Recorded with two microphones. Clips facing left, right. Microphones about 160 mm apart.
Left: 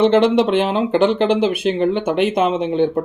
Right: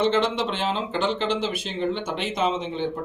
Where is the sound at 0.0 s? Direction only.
60° left (ahead or behind).